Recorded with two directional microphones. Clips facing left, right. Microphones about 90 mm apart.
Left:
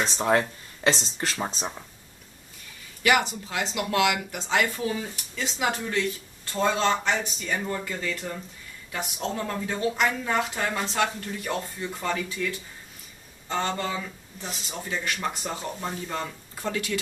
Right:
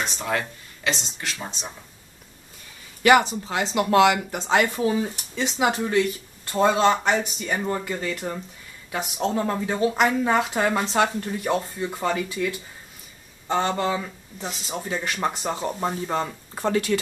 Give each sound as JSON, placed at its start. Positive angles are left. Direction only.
{"t": 0.0, "sound": "speech", "side_deg": 35}
{"t": 3.0, "sound": "speech", "side_deg": -35}
{"t": 10.5, "sound": "speech", "side_deg": -30}
{"t": 14.9, "sound": "speech", "side_deg": -40}
{"t": 15.4, "sound": "speech", "side_deg": -25}